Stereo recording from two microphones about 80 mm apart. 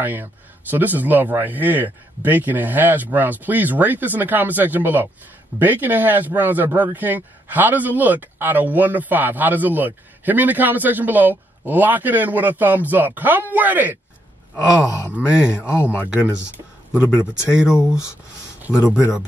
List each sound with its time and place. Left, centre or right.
0.0 s speech: right
15.1 s speech: centre
15.6 s speech: left
16.3 s speech: centre